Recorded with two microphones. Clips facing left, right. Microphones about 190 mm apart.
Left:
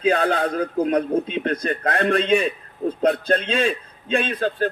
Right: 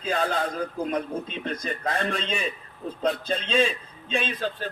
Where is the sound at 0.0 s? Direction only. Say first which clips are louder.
Left 7 dB; 65° left (ahead or behind).